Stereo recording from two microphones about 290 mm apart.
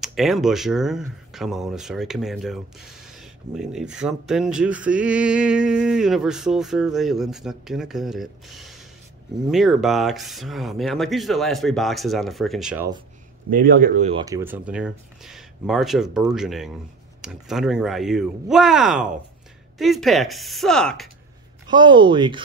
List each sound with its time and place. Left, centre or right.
0.0 s speech: centre
13.5 s speech: right
14.2 s speech: centre
21.6 s speech: centre